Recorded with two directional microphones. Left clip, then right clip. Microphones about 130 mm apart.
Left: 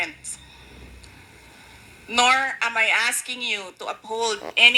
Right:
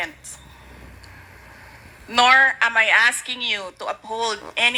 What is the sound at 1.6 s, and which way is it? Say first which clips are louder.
A woman's voice: right 3 dB; 30° right (ahead or behind).